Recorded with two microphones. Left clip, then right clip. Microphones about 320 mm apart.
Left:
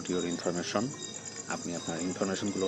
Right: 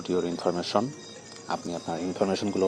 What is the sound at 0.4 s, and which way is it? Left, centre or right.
Speech, centre.